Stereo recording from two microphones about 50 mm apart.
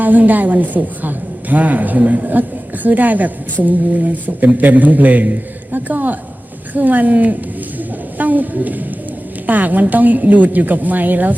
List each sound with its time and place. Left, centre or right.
0.0 s a man's voice: right
7.8 s a sound: right
9.5 s a man's voice: right